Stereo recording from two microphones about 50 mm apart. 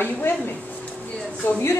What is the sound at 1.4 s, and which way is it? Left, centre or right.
Speech, left.